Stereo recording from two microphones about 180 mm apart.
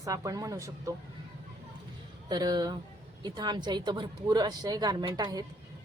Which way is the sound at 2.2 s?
20° right (ahead or behind).